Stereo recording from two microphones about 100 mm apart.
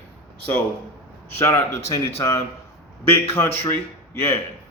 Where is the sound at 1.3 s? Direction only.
25° left (ahead or behind).